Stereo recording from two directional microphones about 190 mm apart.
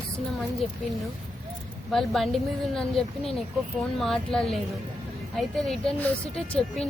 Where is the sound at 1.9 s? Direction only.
Centre (ahead or behind).